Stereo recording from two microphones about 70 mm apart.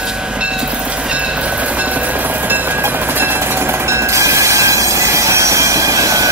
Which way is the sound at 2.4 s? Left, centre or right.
Right.